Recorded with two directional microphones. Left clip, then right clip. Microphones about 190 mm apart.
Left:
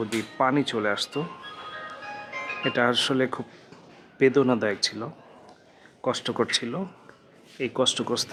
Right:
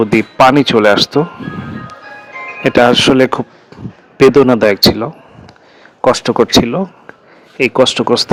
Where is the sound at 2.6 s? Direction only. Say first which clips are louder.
Right 15 dB; 35° right (ahead or behind).